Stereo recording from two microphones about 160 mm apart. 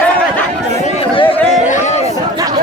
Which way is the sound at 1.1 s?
35° left (ahead or behind).